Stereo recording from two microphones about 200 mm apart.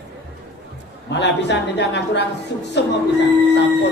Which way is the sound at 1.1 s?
60° left (ahead or behind).